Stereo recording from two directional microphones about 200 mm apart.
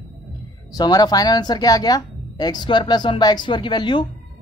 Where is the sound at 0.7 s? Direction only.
20° left (ahead or behind).